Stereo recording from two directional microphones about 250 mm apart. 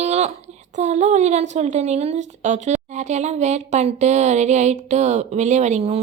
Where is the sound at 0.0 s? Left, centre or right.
Right.